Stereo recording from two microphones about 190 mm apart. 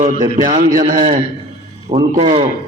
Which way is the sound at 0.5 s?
45° right (ahead or behind).